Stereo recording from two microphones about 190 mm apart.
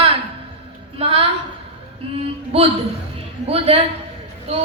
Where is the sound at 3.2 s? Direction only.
30° right (ahead or behind).